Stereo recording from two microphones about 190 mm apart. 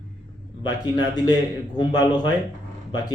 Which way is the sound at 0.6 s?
20° left (ahead or behind).